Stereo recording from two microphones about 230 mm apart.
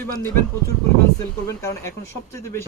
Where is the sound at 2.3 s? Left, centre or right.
Centre.